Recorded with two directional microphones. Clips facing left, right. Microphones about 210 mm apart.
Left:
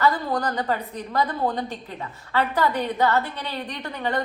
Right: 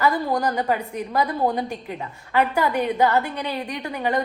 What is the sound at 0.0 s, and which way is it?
A woman's voice, 20° right (ahead or behind).